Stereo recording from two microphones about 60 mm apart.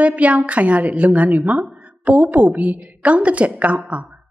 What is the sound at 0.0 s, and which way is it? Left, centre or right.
A woman's voice, right.